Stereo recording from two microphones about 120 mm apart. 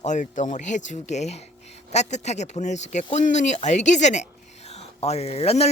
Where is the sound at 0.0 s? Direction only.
85° left.